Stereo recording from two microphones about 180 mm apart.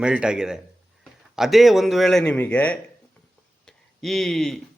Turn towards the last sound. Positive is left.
turn(degrees=0)  # may be behind; listen again after turning